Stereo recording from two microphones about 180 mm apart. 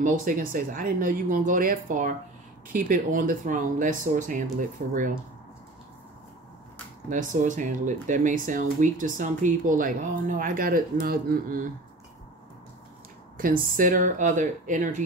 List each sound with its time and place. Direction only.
0.0 s speech: 50° right (ahead or behind)
7.1 s speech: 45° right (ahead or behind)
13.4 s speech: 50° right (ahead or behind)